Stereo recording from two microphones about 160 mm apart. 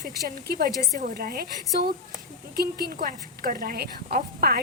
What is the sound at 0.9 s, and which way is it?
A woman's voice, 60° right (ahead or behind).